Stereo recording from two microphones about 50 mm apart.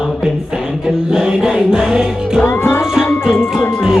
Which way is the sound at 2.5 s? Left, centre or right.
Left.